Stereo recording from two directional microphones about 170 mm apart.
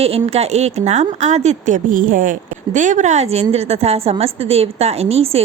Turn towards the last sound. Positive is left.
turn(degrees=-35)  # may be behind; listen again after turning